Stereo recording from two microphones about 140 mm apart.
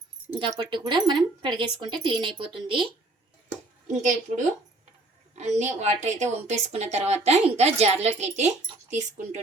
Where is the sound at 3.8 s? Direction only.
65° right (ahead or behind).